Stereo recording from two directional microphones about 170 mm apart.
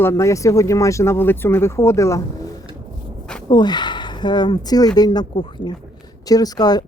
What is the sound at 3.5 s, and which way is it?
Speech, 25° left (ahead or behind).